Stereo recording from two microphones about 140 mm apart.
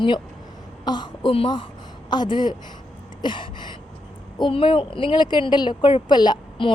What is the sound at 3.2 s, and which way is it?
Gasp, 35° left (ahead or behind).